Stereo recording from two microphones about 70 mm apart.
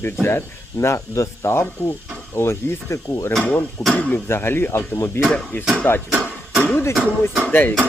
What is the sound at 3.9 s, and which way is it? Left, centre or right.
Speech, left.